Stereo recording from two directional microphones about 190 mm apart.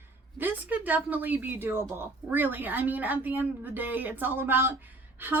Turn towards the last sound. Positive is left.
turn(degrees=-10)  # may be behind; listen again after turning